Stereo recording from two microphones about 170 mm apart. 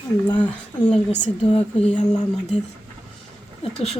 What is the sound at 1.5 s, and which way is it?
Speech, 40° left (ahead or behind).